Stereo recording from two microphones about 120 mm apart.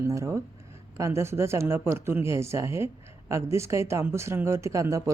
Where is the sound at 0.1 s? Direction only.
25° right (ahead or behind).